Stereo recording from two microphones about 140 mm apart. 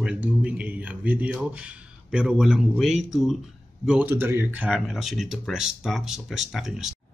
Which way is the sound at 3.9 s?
10° right (ahead or behind).